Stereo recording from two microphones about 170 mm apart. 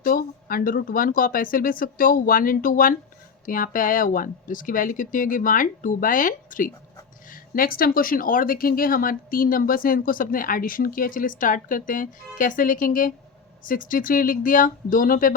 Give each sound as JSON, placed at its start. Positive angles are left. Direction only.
{"t": 0.0, "sound": "speech", "side_deg": 55}